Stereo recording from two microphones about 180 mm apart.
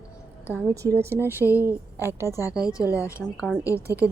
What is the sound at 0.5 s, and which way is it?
A woman's voice, 15° right (ahead or behind).